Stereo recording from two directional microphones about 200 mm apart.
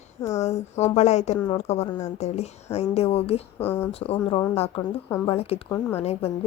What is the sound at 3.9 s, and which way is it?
A woman's voice, 30° left (ahead or behind).